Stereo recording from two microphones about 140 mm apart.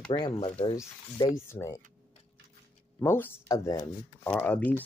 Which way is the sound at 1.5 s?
20° left (ahead or behind).